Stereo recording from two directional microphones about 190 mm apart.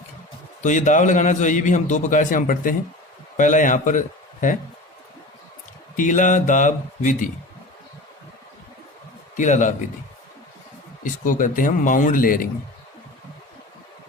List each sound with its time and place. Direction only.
0.6 s a man's voice: 40° left (ahead or behind)
6.0 s a man's voice: 40° left (ahead or behind)
9.4 s a man's voice: 40° left (ahead or behind)
11.0 s speech: 45° left (ahead or behind)